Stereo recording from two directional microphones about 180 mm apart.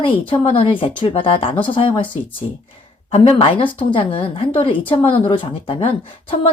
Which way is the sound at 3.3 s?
30° left (ahead or behind).